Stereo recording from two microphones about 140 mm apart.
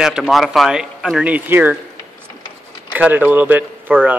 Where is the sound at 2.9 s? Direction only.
10° right (ahead or behind).